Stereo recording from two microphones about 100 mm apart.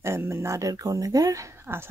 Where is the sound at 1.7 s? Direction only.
25° right (ahead or behind).